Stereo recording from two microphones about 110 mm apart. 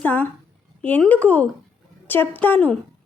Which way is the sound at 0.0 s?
15° left (ahead or behind).